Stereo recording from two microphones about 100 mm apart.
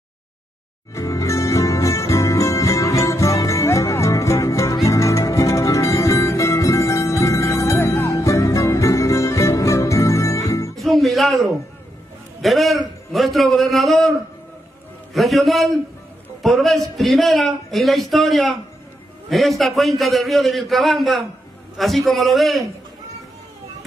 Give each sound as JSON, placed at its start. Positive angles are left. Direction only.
{"t": 0.9, "sound": "jingle bell", "side_deg": 30}
{"t": 3.4, "sound": "music", "side_deg": 30}
{"t": 10.7, "sound": "music", "side_deg": 0}
{"t": 12.4, "sound": "a man's voice", "side_deg": 0}
{"t": 13.1, "sound": "a sound", "side_deg": 0}
{"t": 15.1, "sound": "a man's voice", "side_deg": 0}